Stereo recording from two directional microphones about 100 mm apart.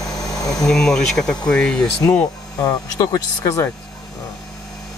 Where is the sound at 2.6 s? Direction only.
35° left (ahead or behind).